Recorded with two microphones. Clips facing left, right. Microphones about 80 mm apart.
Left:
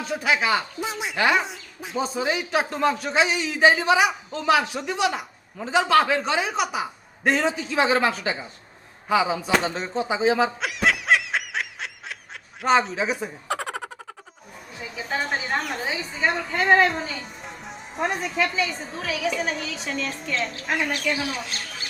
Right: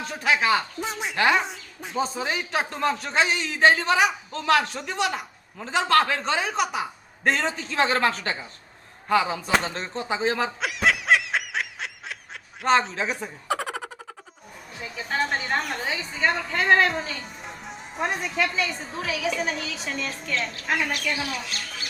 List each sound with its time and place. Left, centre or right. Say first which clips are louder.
0.0 s a man's voice: even; centre
9.0 s a sound: left 1 dB; centre
12.6 s speech: left 1 dB; centre
21.2 s speech: left 1 dB; left